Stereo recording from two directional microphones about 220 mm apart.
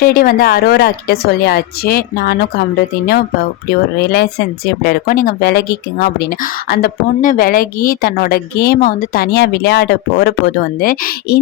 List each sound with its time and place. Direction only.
0.0 s speech: 40° left (ahead or behind)
3.9 s speech: 45° left (ahead or behind)